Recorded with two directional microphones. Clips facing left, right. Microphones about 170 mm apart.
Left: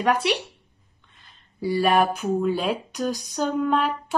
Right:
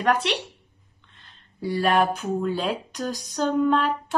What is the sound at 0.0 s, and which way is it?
Speech, 5° left (ahead or behind).